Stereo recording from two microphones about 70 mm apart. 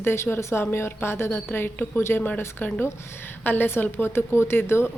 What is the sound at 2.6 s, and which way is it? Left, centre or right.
A woman's voice, centre.